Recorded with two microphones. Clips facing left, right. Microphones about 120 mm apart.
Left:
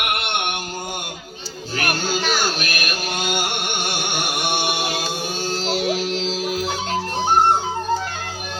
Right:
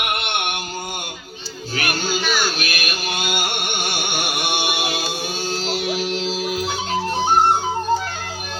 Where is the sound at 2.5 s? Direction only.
5° right (ahead or behind).